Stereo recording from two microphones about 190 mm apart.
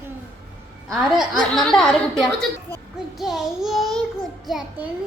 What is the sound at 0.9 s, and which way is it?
A woman's voice, centre (ahead or behind).